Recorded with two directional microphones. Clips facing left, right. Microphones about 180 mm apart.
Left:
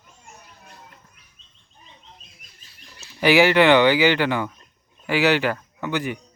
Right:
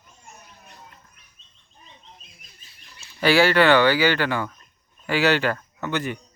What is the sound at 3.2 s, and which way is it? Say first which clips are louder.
Speech: left 2 dB; 15° left (ahead or behind).